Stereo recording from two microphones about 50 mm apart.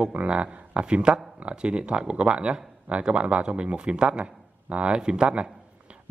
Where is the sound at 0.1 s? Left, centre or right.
Right.